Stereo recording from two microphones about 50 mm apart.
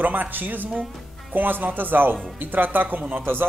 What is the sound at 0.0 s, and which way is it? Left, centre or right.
A woman's voice, right.